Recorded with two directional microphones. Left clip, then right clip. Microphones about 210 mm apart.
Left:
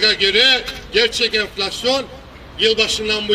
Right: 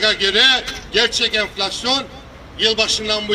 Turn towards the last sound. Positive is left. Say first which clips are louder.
# left 1 dB
turn(degrees=-20)  # may be behind; listen again after turning